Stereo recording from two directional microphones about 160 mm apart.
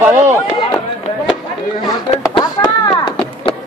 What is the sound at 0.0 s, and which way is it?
Chop, 15° right (ahead or behind).